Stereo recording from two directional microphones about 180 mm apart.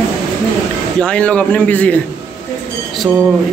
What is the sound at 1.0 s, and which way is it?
A man's voice, 5° left (ahead or behind).